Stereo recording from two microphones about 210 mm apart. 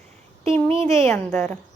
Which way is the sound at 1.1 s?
5° left (ahead or behind).